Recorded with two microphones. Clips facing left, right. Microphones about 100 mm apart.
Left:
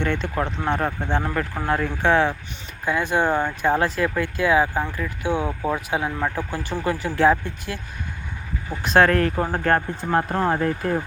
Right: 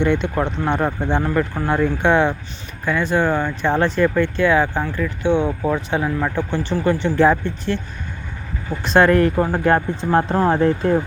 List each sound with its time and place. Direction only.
0.0 s speech: centre (ahead or behind)
2.8 s speech: 15° left (ahead or behind)
8.8 s speech: centre (ahead or behind)
9.7 s speech: 25° right (ahead or behind)